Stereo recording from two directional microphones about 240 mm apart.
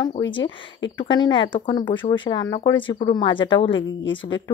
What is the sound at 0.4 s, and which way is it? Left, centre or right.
Speech, left.